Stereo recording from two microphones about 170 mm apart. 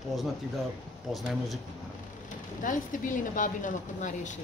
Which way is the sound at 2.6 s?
50° left (ahead or behind).